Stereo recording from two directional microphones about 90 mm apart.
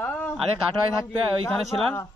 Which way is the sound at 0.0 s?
20° left (ahead or behind).